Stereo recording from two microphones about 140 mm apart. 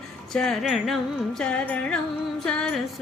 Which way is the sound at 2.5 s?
5° left (ahead or behind).